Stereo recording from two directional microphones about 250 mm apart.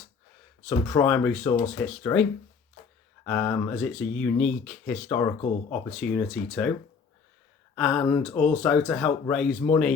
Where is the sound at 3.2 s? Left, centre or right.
Centre.